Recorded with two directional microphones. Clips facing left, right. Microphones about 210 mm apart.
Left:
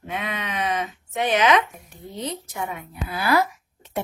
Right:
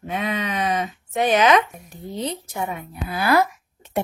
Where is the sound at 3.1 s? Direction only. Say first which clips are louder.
Right 2 dB; 50° right (ahead or behind).